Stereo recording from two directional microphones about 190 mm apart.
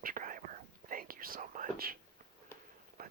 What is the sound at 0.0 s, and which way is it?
Whispering, 45° right (ahead or behind).